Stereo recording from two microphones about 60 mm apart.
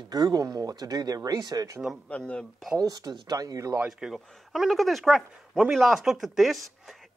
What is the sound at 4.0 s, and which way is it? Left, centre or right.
Speech, centre.